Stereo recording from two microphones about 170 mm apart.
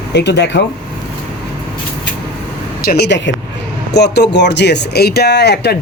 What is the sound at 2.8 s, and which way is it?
Speech, 65° left (ahead or behind).